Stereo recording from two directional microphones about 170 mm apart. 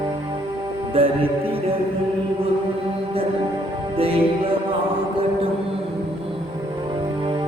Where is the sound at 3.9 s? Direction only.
35° right (ahead or behind).